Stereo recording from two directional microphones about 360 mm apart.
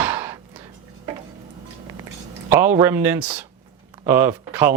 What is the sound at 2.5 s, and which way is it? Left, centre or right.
Speech, centre.